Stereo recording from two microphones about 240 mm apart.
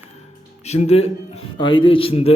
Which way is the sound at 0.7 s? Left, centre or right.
Left.